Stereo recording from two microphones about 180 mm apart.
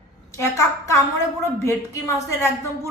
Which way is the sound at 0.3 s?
15° left (ahead or behind).